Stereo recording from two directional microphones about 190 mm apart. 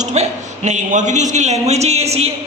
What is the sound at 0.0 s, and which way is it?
A man's voice, 35° right (ahead or behind).